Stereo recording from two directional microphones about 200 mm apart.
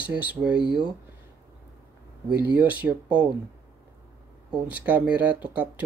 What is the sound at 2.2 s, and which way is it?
Speech, 5° right (ahead or behind).